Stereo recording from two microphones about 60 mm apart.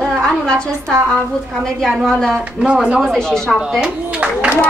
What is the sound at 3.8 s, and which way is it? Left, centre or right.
Clapping, centre.